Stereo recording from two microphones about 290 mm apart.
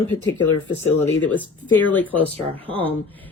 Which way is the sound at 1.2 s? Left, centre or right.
Centre.